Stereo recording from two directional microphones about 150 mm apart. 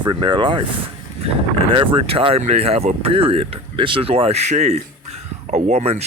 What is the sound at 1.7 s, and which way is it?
Speech, 35° right (ahead or behind).